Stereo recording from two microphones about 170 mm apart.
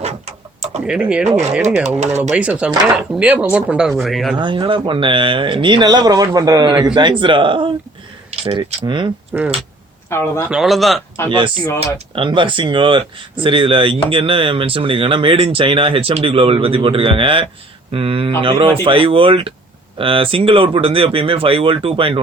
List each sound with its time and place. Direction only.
0.9 s speech: 5° right (ahead or behind)
4.4 s speech: 25° right (ahead or behind)
9.3 s speech: 10° right (ahead or behind)
10.1 s speech: 15° left (ahead or behind)
10.5 s speech: centre (ahead or behind)
11.3 s speech: 30° right (ahead or behind)